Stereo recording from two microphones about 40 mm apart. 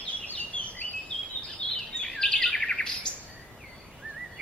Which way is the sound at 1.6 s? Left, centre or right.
Centre.